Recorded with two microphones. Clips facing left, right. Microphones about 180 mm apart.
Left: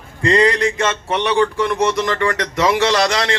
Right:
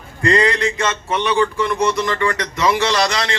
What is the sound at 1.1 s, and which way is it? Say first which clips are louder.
Speech: left 1 dB; 70° left (ahead or behind).